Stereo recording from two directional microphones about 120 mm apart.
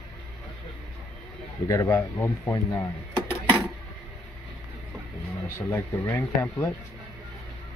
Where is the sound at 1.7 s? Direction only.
25° left (ahead or behind).